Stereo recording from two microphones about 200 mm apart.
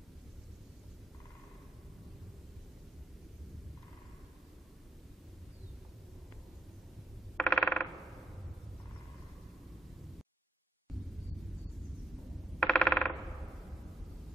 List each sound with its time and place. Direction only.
7.3 s mechanisms: 5° left (ahead or behind)
12.5 s coin: 5° left (ahead or behind)